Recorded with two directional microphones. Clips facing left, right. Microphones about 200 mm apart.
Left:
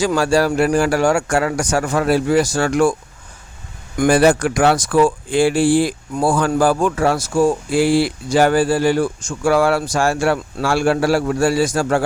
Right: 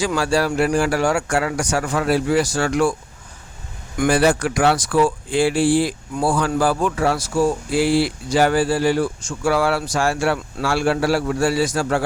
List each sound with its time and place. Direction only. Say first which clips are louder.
0.0 s speech: left 4 dB; 45° left (ahead or behind)
4.0 s speech: left 4 dB; 45° left (ahead or behind)